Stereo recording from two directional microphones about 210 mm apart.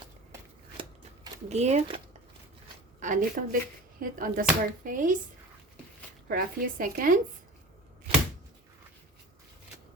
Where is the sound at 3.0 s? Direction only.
40° right (ahead or behind).